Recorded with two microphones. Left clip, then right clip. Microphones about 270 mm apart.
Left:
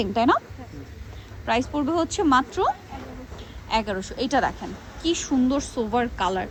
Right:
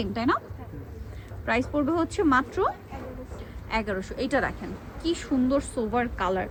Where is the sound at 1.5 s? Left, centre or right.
Centre.